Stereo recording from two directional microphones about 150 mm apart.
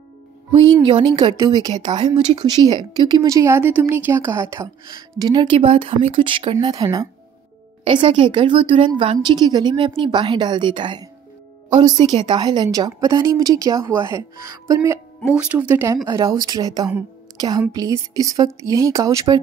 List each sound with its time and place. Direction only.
0.8 s a woman's voice: 30° right (ahead or behind)
15.2 s speech: 10° right (ahead or behind); by 19.4 s 25° right (ahead or behind)